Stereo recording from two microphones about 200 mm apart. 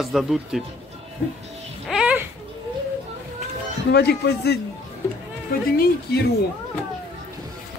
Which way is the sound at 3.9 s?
55° left (ahead or behind).